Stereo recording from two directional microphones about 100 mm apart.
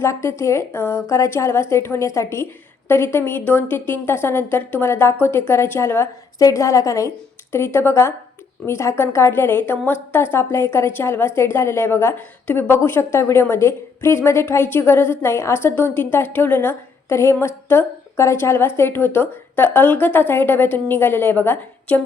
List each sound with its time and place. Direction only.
0.0 s a woman's voice: 30° left (ahead or behind)